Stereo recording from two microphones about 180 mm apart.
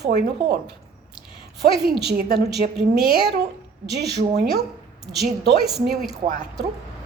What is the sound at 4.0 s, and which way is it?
Speech, 65° right (ahead or behind).